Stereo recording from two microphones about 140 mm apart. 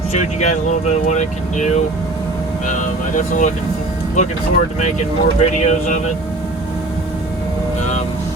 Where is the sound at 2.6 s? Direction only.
65° left (ahead or behind).